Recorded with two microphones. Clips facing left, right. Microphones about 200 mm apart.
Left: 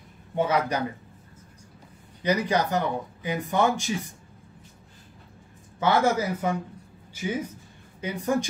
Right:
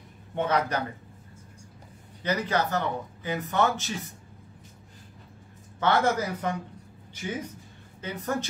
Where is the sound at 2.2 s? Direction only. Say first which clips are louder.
Left 3 dB; 15° left (ahead or behind).